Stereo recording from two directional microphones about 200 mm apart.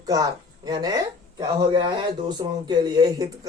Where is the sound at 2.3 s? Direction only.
20° right (ahead or behind).